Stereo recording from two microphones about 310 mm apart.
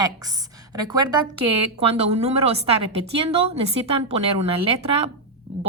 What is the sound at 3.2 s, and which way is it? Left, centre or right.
A woman's voice, centre.